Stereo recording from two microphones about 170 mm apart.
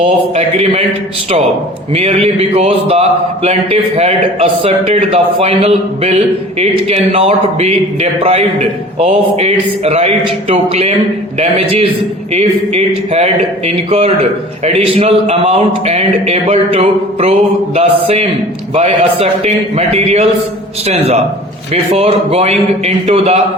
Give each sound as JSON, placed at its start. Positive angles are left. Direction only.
{"t": 0.0, "sound": "speech", "side_deg": -40}
{"t": 1.9, "sound": "speech", "side_deg": -40}